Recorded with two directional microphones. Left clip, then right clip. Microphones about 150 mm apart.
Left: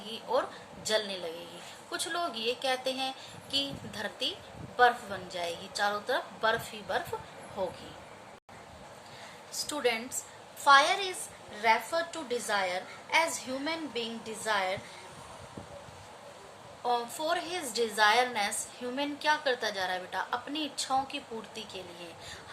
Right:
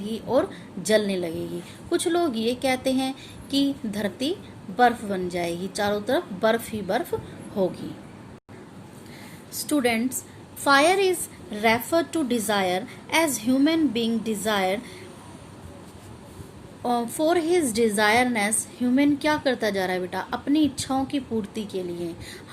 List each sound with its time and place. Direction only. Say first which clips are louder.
0.1 s a woman's voice: right 7 dB; 40° right (ahead or behind)
9.6 s a woman's voice: right 7 dB; 45° right (ahead or behind)
16.8 s a woman's voice: right 7 dB; 45° right (ahead or behind)